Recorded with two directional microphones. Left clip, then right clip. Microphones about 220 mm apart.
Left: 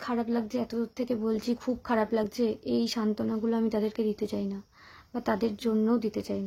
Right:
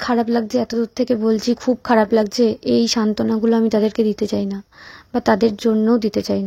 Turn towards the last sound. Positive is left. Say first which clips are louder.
# right 12 dB
turn(degrees=-35)  # may be behind; listen again after turning